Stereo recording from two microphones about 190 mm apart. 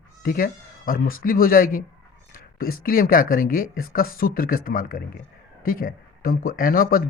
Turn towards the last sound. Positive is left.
turn(degrees=50)  # may be behind; listen again after turning